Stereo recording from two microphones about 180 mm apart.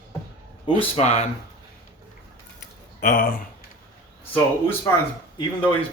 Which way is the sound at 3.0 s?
50° left (ahead or behind).